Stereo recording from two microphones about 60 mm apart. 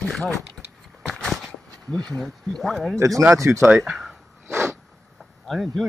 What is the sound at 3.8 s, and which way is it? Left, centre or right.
Speech, centre.